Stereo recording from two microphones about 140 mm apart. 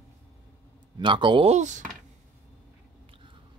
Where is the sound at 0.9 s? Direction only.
35° right (ahead or behind).